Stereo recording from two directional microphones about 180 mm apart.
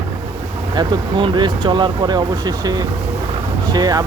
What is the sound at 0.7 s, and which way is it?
Speech, 25° right (ahead or behind).